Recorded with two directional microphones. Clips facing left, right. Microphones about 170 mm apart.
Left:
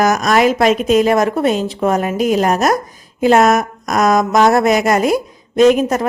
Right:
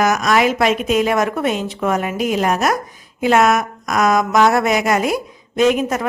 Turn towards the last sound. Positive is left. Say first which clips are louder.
# left 5 dB
turn(degrees=40)  # may be behind; listen again after turning